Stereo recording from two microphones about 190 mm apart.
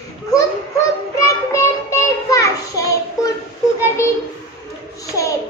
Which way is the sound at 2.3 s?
15° left (ahead or behind).